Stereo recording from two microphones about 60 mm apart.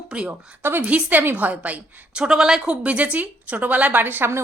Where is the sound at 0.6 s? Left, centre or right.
Right.